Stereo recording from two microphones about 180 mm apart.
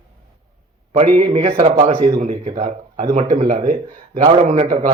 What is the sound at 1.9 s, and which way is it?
A man's voice, 25° right (ahead or behind).